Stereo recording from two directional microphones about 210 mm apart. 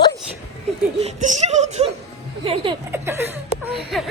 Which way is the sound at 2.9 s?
10° right (ahead or behind).